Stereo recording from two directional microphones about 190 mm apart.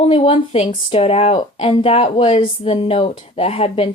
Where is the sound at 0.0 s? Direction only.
30° left (ahead or behind).